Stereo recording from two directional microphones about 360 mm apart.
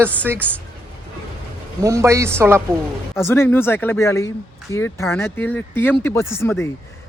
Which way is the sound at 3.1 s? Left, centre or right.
Centre.